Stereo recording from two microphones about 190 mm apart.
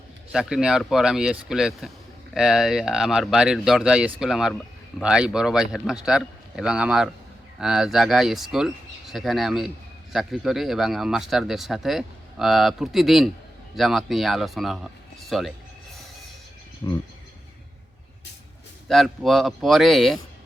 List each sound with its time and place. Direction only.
0.3 s speech: 5° right (ahead or behind)
15.3 s a sound: centre (ahead or behind)
16.8 s speech: 20° left (ahead or behind)
18.9 s speech: centre (ahead or behind)